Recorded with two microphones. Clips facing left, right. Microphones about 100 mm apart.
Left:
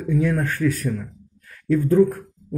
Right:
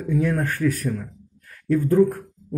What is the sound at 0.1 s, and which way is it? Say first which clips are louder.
Speech: left 1 dB; 15° right (ahead or behind).